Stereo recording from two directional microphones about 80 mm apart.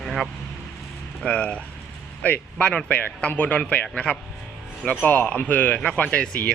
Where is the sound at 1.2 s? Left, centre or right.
Centre.